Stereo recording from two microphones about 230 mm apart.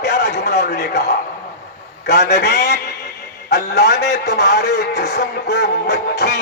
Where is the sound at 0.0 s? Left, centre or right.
Left.